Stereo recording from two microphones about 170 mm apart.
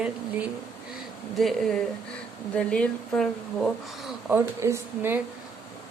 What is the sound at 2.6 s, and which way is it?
A woman's voice, 5° left (ahead or behind).